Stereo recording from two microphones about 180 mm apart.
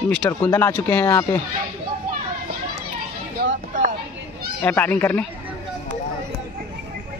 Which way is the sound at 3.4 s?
45° right (ahead or behind).